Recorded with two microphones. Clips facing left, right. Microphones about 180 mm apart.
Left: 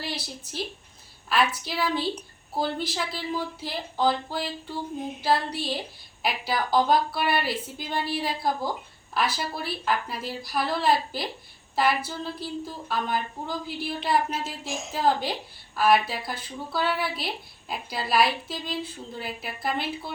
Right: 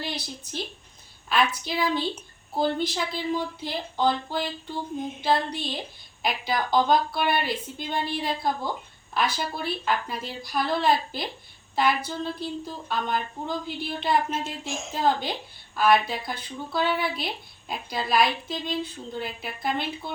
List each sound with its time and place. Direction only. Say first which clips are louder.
0.0 s speech: right 1 dB; 5° left (ahead or behind)